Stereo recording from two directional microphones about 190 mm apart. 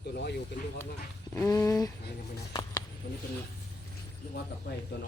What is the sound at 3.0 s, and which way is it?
Speech, 50° left (ahead or behind).